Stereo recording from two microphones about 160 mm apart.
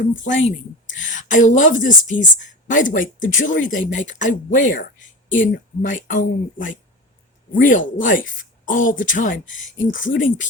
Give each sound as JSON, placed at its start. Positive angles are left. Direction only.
{"t": 0.0, "sound": "a woman's voice", "side_deg": 55}